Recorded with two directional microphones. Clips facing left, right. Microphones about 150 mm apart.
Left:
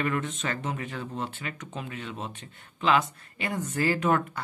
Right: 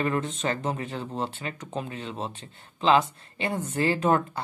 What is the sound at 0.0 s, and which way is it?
A man's voice, 30° right (ahead or behind).